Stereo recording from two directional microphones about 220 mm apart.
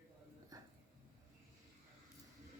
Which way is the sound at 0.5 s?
15° right (ahead or behind).